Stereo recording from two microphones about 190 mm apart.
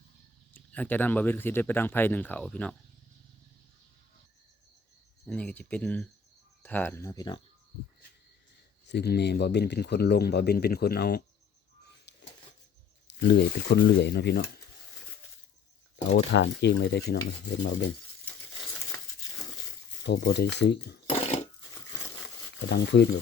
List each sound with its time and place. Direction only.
0.5 s speech: 10° left (ahead or behind)
5.2 s speech: 5° left (ahead or behind); by 7.4 s 20° left (ahead or behind)
8.9 s speech: 60° left (ahead or behind)
12.1 s a sound: 65° left (ahead or behind)
13.1 s speech: 65° left (ahead or behind)
16.1 s speech: 65° left (ahead or behind)
20.1 s speech: 60° left (ahead or behind)
22.7 s speech: 65° left (ahead or behind)